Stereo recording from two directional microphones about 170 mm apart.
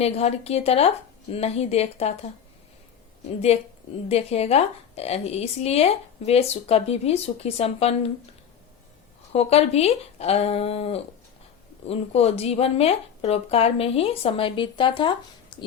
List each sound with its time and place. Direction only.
0.0 s speech: 35° left (ahead or behind)
3.2 s speech: 40° left (ahead or behind)
9.3 s speech: 35° left (ahead or behind)